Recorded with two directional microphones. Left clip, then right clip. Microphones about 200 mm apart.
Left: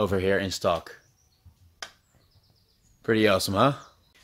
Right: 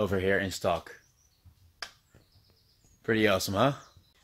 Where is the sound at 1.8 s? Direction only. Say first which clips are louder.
Left 1 dB; 30° right (ahead or behind).